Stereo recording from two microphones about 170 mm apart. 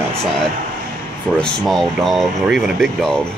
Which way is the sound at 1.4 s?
Centre (ahead or behind).